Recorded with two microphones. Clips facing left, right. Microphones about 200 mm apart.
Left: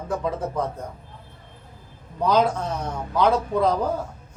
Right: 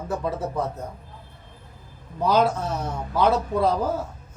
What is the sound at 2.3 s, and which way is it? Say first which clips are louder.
Speech: even; 5° right (ahead or behind).